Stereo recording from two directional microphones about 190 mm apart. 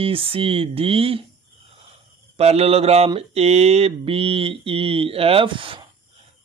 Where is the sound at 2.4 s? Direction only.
35° right (ahead or behind).